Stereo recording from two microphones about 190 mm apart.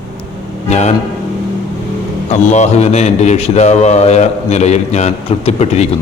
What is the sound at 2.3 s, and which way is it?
A man's voice, 35° left (ahead or behind).